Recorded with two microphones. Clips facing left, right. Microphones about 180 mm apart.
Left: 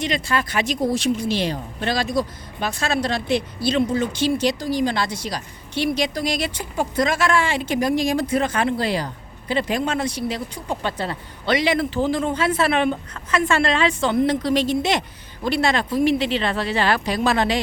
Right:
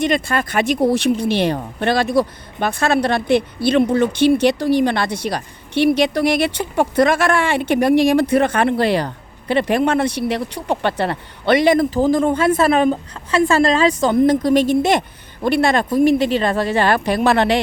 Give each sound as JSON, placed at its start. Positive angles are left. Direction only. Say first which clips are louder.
{"t": 0.0, "sound": "speech", "louder": "right 5 dB", "side_deg": -50}